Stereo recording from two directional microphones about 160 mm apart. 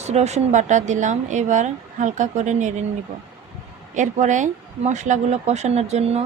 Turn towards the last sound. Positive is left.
turn(degrees=-45)  # may be behind; listen again after turning